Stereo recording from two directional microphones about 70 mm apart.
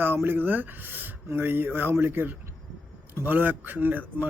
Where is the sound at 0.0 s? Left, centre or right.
Right.